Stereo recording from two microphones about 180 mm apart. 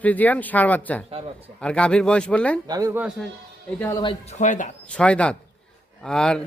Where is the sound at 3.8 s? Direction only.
15° left (ahead or behind).